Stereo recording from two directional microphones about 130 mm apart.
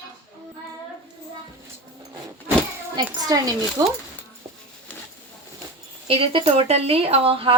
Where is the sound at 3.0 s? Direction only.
30° right (ahead or behind).